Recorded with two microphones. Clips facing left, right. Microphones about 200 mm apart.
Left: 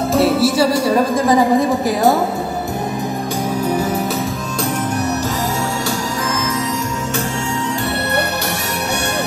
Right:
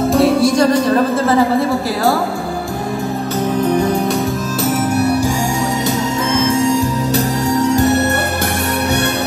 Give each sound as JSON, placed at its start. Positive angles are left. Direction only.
{"t": 0.1, "sound": "music", "side_deg": 5}
{"t": 3.6, "sound": "music", "side_deg": 5}
{"t": 7.7, "sound": "music", "side_deg": -45}